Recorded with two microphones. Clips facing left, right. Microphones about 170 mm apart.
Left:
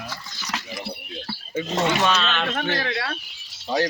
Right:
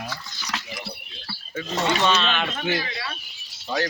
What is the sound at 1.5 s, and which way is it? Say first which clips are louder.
Speech: left 3 dB; 20° left (ahead or behind).